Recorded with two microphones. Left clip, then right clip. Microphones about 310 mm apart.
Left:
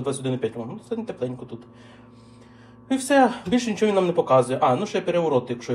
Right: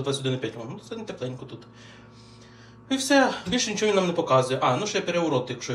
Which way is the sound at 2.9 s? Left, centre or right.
Left.